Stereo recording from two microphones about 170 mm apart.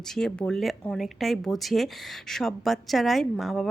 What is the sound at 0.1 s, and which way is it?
Speech, 5° left (ahead or behind).